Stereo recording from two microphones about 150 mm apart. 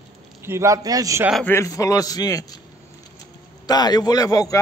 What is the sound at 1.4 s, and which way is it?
Speech, 20° left (ahead or behind).